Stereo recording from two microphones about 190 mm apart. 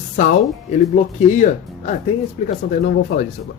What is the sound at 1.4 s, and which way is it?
Speech, 40° left (ahead or behind).